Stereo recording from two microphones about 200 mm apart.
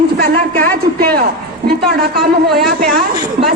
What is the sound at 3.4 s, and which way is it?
Speech, 50° right (ahead or behind).